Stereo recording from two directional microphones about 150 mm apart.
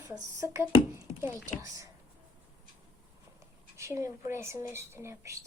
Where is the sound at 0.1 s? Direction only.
20° right (ahead or behind).